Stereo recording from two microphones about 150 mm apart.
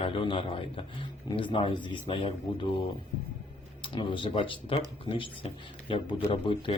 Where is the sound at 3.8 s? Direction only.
35° left (ahead or behind).